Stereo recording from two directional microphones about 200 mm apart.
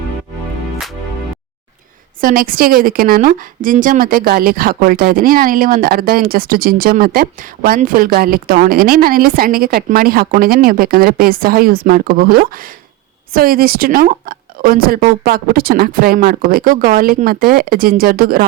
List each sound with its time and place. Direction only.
2.2 s a woman's voice: 45° right (ahead or behind)